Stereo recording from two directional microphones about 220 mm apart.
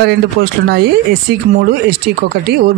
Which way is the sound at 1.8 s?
45° right (ahead or behind).